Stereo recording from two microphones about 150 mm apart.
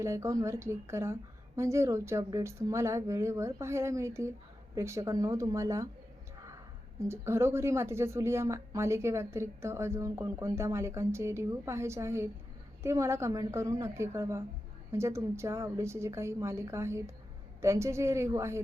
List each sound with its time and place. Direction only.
0.0 s a woman's voice: 20° right (ahead or behind)
7.0 s a woman's voice: 15° right (ahead or behind)